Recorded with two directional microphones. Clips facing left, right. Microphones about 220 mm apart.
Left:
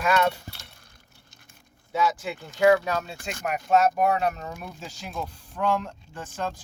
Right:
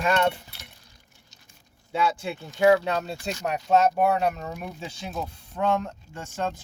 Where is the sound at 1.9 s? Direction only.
25° right (ahead or behind).